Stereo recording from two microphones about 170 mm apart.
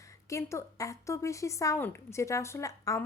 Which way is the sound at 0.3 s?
15° left (ahead or behind).